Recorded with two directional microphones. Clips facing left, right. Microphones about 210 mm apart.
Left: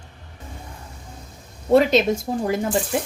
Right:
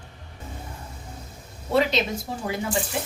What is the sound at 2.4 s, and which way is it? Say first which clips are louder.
Speech: left 5 dB; 45° left (ahead or behind).